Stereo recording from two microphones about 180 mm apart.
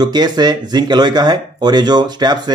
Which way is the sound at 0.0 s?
25° right (ahead or behind).